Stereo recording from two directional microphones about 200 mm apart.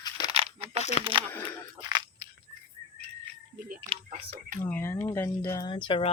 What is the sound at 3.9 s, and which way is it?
Speech, 40° right (ahead or behind).